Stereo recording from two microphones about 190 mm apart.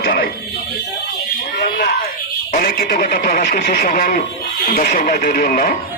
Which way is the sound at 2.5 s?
50° left (ahead or behind).